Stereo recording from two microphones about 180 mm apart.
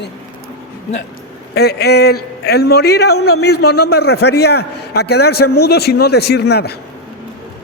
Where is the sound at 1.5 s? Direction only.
65° left (ahead or behind).